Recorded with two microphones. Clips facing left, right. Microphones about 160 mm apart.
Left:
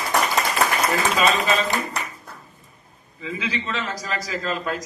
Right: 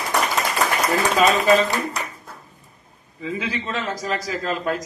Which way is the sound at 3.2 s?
45° right (ahead or behind).